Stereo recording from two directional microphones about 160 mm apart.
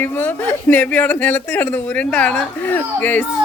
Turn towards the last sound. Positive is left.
turn(degrees=10)  # may be behind; listen again after turning